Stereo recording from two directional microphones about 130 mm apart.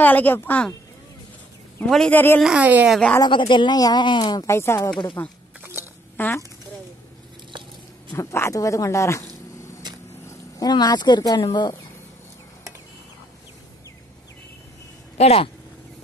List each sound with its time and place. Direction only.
0.0 s speech: 15° left (ahead or behind)
1.9 s speech: 5° left (ahead or behind)
2.4 s speech: 10° right (ahead or behind)
2.9 s speech: 10° left (ahead or behind)
3.3 s speech: 35° left (ahead or behind)
4.5 s speech: 20° left (ahead or behind)
5.6 s a sound: 20° right (ahead or behind)
6.1 s speech: 15° left (ahead or behind)
8.1 s speech: 20° left (ahead or behind)
10.2 s speech: 30° left (ahead or behind)
15.1 s speech: 50° left (ahead or behind)